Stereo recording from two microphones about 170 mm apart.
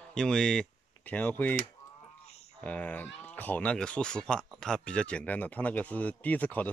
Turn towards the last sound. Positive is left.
turn(degrees=10)  # may be behind; listen again after turning